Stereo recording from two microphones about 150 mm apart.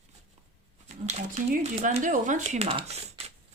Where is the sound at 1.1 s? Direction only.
50° right (ahead or behind).